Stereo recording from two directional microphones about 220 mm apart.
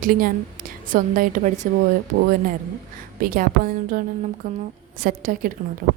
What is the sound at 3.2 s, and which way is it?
A woman's voice, 40° right (ahead or behind).